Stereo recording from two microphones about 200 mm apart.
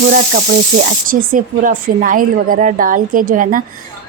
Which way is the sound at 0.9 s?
45° right (ahead or behind).